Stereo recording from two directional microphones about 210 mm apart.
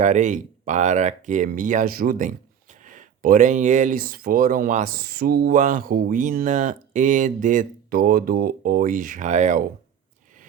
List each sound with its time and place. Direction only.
0.0 s speech: 35° right (ahead or behind)